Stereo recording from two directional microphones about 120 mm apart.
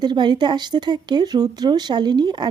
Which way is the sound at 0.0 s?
40° right (ahead or behind).